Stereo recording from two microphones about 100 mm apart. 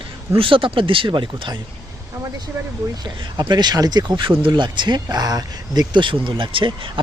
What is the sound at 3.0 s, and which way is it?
Speech, 50° right (ahead or behind).